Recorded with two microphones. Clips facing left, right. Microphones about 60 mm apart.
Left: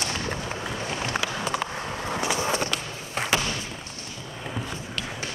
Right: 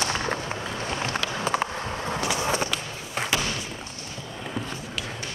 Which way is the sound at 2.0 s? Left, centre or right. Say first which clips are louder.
Left 1 dB; centre.